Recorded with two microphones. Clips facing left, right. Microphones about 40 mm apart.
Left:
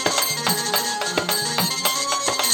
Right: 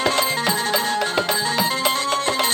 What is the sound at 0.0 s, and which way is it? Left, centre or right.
Music, right.